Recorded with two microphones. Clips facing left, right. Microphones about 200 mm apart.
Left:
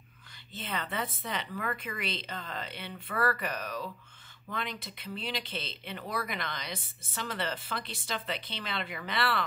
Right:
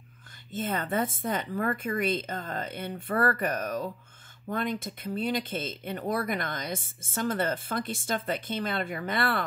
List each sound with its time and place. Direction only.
0.5 s speech: 50° right (ahead or behind)